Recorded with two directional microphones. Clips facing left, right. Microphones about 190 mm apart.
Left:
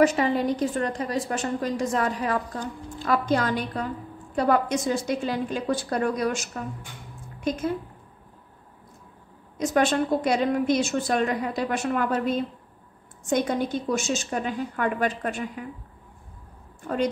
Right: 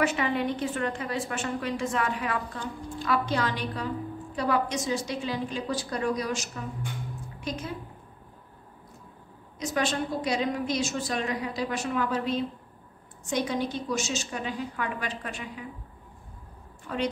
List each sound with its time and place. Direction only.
0.0 s a woman's voice: 40° left (ahead or behind)
9.6 s a woman's voice: 50° left (ahead or behind)
16.8 s a woman's voice: 45° left (ahead or behind)